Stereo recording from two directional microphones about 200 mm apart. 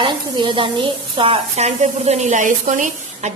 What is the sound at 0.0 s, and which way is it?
A woman's voice, 25° right (ahead or behind).